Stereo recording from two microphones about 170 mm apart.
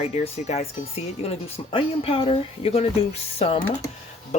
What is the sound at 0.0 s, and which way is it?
Speech, 40° left (ahead or behind).